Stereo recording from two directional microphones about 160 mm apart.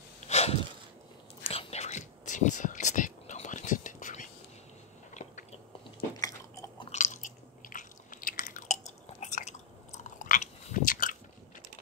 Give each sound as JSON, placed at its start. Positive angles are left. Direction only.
{"t": 0.2, "sound": "a sound", "side_deg": 40}
{"t": 1.5, "sound": "whispering", "side_deg": 40}
{"t": 5.1, "sound": "biting", "side_deg": 50}
{"t": 6.1, "sound": "biting", "side_deg": 20}
{"t": 6.9, "sound": "chewing", "side_deg": 50}